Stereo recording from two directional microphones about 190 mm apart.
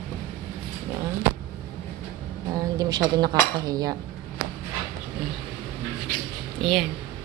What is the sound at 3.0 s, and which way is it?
Cutlery, 20° right (ahead or behind).